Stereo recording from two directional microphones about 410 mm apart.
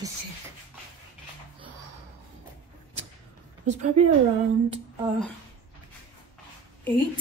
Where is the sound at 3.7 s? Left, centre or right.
Centre.